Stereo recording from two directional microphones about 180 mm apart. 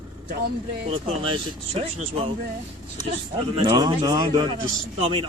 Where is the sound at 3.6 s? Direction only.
25° right (ahead or behind).